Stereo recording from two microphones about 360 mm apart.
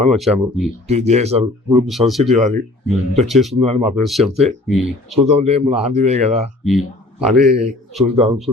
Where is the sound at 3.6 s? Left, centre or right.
Centre.